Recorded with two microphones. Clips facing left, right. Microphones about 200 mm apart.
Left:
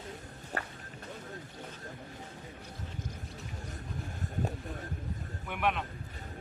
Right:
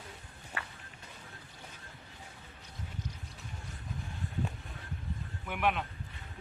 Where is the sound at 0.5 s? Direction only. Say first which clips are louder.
Left 5 dB; 40° left (ahead or behind).